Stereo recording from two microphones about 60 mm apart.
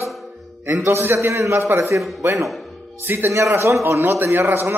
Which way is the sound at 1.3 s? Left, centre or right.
Right.